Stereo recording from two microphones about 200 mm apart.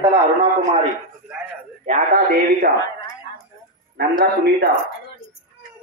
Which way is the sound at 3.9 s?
55° right (ahead or behind).